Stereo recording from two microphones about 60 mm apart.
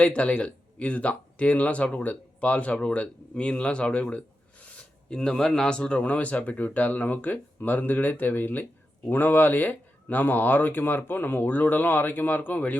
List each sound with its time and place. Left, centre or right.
0.0 s speech: left